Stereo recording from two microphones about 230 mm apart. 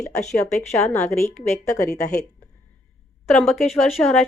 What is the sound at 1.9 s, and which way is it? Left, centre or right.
Speech, left.